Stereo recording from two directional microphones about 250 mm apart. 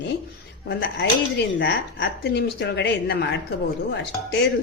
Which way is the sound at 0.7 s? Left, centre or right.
Left.